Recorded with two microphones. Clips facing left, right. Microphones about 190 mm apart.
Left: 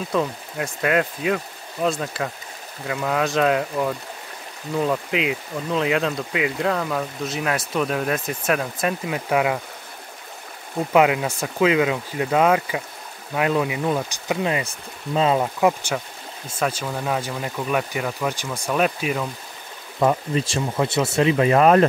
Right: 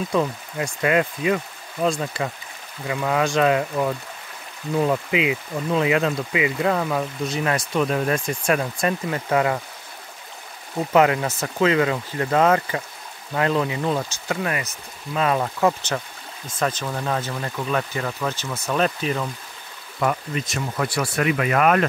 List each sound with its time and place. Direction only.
0.1 s speech: centre (ahead or behind)
10.9 s speech: 10° left (ahead or behind)
15.4 s speech: 10° left (ahead or behind)
20.0 s speech: 25° left (ahead or behind)